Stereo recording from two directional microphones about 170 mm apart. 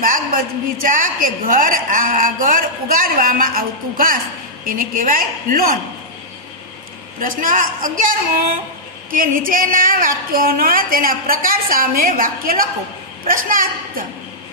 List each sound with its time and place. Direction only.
0.0 s a woman's voice: 55° right (ahead or behind)
7.2 s a woman's voice: 55° right (ahead or behind)